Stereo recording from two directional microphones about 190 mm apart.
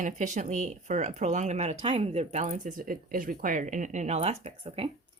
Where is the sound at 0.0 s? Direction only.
40° right (ahead or behind).